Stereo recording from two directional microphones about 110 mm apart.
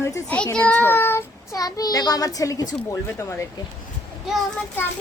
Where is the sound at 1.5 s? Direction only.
35° left (ahead or behind).